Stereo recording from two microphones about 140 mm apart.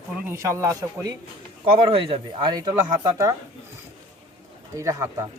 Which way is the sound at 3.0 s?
20° right (ahead or behind).